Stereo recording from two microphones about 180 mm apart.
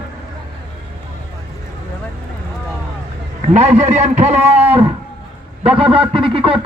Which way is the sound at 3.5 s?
40° right (ahead or behind).